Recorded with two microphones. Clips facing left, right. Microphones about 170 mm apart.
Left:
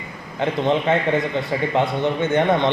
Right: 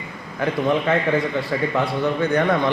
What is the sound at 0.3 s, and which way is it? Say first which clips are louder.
A man's voice: left 1 dB; 25° left (ahead or behind).